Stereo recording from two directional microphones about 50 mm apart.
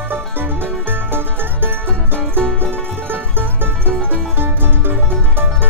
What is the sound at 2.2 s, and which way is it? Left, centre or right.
Music, centre.